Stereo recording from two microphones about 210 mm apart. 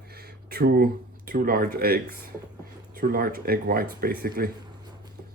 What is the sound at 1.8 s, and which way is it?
Speech, 45° right (ahead or behind).